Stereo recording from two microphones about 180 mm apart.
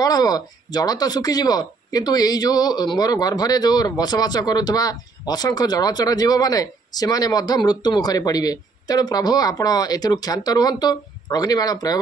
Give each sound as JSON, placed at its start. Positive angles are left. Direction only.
{"t": 0.0, "sound": "speech", "side_deg": 20}